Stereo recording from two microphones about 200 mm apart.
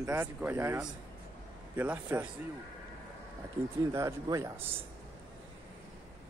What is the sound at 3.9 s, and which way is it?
Speech, 15° right (ahead or behind).